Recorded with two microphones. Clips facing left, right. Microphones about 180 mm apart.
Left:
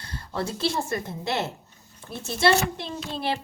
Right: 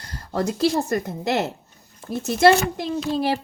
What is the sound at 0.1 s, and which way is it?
A woman's voice, 45° right (ahead or behind).